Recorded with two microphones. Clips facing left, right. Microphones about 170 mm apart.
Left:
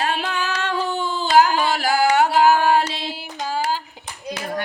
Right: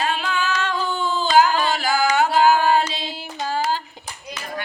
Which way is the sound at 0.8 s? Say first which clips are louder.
Left 1 dB; 65° left (ahead or behind).